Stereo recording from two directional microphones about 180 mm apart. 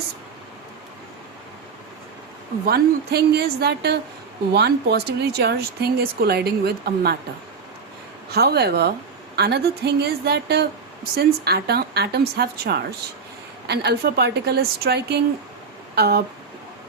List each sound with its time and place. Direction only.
2.6 s speech: 60° right (ahead or behind)
8.3 s speech: 65° right (ahead or behind)